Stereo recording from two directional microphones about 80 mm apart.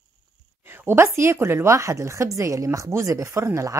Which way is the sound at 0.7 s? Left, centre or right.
Right.